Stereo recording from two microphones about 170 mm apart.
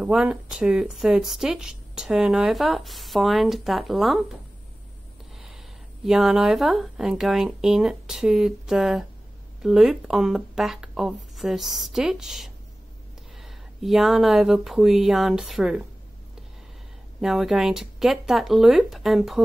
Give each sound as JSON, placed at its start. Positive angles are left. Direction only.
{"t": 0.0, "sound": "speech", "side_deg": -5}
{"t": 6.0, "sound": "speech", "side_deg": 0}
{"t": 17.2, "sound": "speech", "side_deg": 0}